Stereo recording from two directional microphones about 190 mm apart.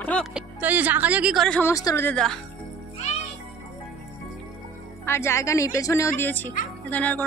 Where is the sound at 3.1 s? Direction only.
35° left (ahead or behind).